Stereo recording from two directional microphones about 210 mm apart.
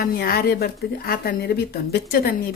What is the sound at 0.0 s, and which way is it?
A woman's voice, 45° left (ahead or behind).